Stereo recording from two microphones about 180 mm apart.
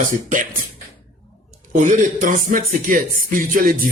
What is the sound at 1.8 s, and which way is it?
Speech, 45° right (ahead or behind).